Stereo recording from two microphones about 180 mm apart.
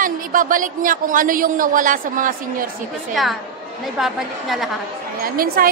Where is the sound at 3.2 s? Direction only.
Centre (ahead or behind).